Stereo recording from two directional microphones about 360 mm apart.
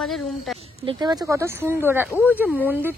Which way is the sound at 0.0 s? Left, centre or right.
Centre.